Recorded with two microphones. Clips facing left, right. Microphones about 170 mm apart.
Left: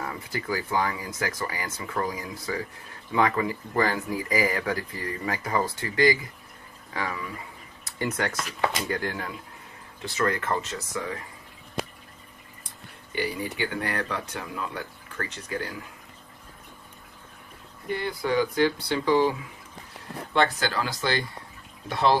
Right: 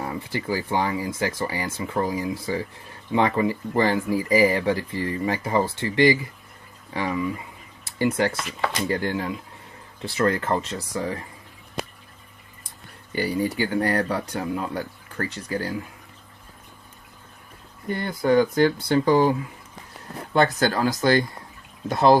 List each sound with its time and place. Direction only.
0.0 s speech: 30° right (ahead or behind)
13.1 s speech: 35° right (ahead or behind)
17.9 s speech: 45° right (ahead or behind)
20.3 s speech: 40° right (ahead or behind)